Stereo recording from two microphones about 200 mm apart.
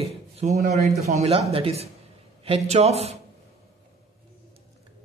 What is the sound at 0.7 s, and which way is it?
A man's voice, 35° right (ahead or behind).